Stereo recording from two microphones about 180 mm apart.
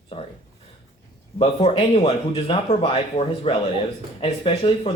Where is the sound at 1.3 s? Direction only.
30° left (ahead or behind).